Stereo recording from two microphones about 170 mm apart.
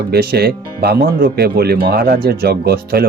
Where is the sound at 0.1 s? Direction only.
65° right (ahead or behind).